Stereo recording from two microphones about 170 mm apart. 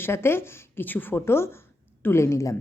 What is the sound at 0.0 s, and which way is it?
A woman's voice, 15° left (ahead or behind).